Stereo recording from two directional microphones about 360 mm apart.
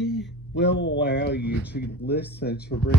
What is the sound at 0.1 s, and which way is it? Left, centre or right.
Speech, left.